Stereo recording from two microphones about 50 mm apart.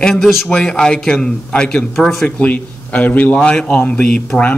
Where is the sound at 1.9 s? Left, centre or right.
Centre.